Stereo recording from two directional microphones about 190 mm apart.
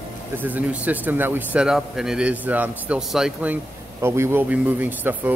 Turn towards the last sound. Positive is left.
turn(degrees=-10)  # may be behind; listen again after turning